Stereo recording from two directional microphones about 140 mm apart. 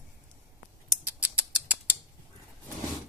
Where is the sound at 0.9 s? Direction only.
10° right (ahead or behind).